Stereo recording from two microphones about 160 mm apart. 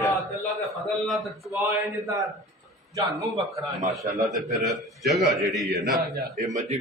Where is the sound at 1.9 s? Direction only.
20° right (ahead or behind).